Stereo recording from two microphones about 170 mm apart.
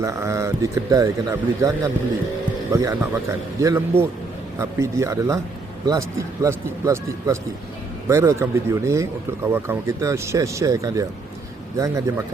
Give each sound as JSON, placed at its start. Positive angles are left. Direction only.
{"t": 0.0, "sound": "speech", "side_deg": -15}